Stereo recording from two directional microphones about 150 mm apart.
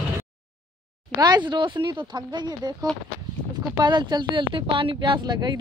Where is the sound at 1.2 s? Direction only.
30° right (ahead or behind).